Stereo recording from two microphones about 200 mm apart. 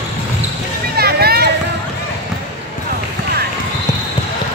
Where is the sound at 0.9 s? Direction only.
50° right (ahead or behind).